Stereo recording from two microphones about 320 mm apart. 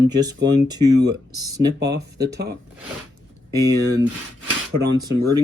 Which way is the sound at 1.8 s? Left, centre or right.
Right.